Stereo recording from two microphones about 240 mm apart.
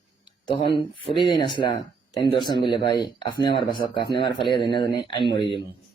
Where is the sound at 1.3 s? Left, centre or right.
Centre.